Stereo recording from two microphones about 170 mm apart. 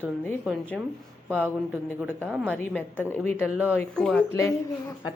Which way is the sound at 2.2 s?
10° right (ahead or behind).